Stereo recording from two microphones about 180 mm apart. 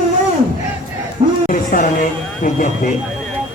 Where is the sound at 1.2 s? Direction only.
40° right (ahead or behind).